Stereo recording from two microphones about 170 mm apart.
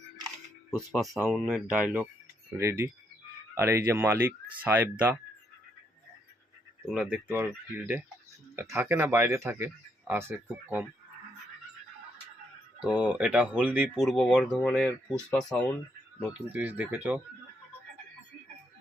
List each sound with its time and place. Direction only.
0.7 s speech: centre (ahead or behind)
2.6 s speech: 15° right (ahead or behind)
6.9 s speech: 5° right (ahead or behind)
12.8 s speech: 5° right (ahead or behind)
16.5 s speech: 10° right (ahead or behind)